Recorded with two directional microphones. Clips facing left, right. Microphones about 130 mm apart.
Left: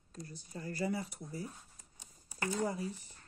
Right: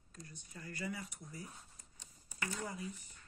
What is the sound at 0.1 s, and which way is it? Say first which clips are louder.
Speech: left 7 dB; 30° left (ahead or behind).